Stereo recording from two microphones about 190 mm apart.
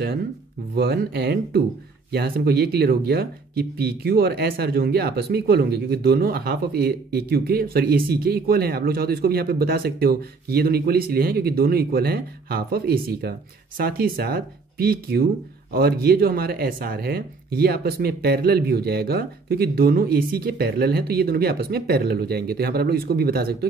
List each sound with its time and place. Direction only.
0.7 s speech: 55° right (ahead or behind)